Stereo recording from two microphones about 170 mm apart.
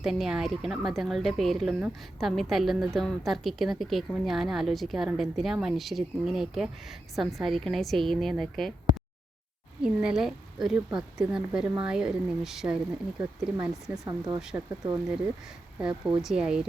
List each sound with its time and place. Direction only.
0.0 s speech: centre (ahead or behind)
9.8 s speech: 5° right (ahead or behind)
14.0 s speech: 20° right (ahead or behind)
15.8 s speech: 5° right (ahead or behind)